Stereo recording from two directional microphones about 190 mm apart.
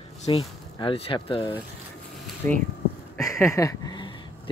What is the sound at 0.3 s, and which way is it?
Speech, 25° left (ahead or behind).